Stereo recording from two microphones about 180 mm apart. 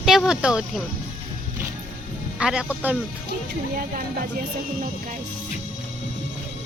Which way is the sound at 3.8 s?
50° right (ahead or behind).